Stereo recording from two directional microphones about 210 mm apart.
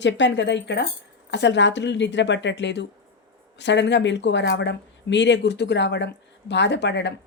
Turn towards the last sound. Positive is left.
turn(degrees=55)  # may be behind; listen again after turning